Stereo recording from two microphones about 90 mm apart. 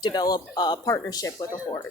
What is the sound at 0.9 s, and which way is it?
Speech, 40° left (ahead or behind).